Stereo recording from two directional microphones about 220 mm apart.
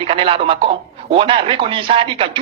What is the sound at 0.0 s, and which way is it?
Speech, 25° right (ahead or behind).